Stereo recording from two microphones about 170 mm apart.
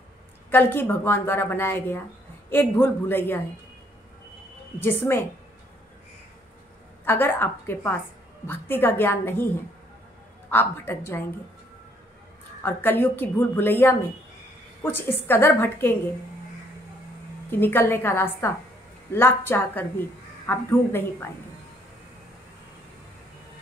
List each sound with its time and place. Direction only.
0.5 s a woman's voice: 10° left (ahead or behind)
4.7 s a woman's voice: 15° left (ahead or behind)
7.1 s a woman's voice: 10° left (ahead or behind)
10.5 s a woman's voice: 10° left (ahead or behind)
12.6 s a woman's voice: 10° left (ahead or behind)
17.5 s a woman's voice: 10° left (ahead or behind)